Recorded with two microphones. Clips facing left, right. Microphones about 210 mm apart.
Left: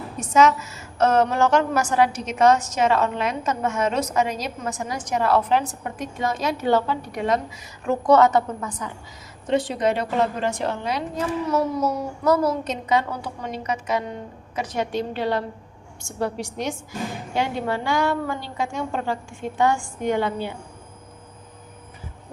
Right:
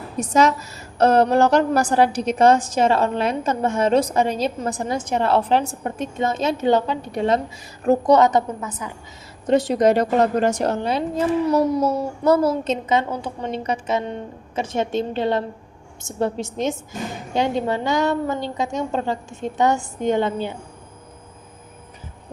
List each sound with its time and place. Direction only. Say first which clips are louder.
0.2 s a woman's voice: even; 35° right (ahead or behind)
8.0 s a child's voice: left 1 dB; 20° right (ahead or behind)
9.5 s a woman's voice: right 5 dB; 40° right (ahead or behind); by 20.6 s 20° right (ahead or behind)